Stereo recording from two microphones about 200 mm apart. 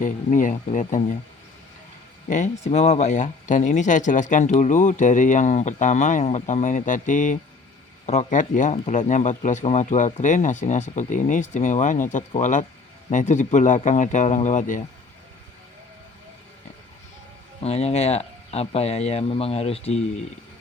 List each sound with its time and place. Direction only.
0.0 s speech: 40° left (ahead or behind)
2.2 s speech: 40° left (ahead or behind)
17.6 s speech: 30° left (ahead or behind)